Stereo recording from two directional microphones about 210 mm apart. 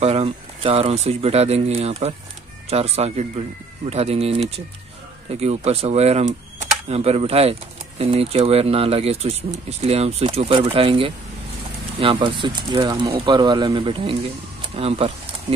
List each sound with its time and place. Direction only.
0.0 s speech: 30° right (ahead or behind)